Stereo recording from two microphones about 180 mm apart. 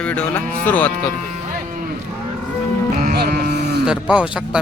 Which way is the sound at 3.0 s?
55° right (ahead or behind).